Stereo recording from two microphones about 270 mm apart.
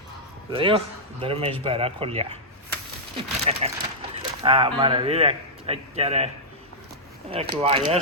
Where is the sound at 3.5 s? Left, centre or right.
Right.